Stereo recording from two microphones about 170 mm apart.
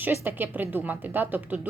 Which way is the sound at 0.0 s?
10° right (ahead or behind).